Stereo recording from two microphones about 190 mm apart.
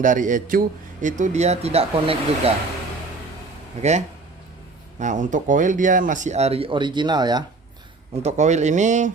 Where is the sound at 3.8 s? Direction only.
35° right (ahead or behind).